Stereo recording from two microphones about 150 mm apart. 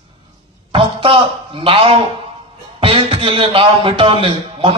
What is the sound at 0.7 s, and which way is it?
A man's voice, 35° right (ahead or behind).